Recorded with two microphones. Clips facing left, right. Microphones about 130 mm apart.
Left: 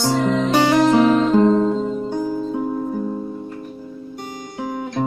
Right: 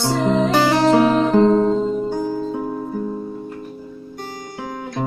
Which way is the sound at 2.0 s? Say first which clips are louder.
Even; 10° right (ahead or behind).